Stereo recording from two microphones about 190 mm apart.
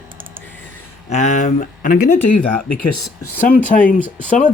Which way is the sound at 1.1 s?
40° left (ahead or behind).